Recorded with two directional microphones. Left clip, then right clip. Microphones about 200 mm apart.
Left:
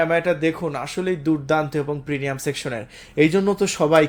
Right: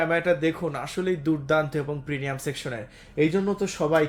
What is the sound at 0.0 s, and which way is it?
Speech, 25° left (ahead or behind).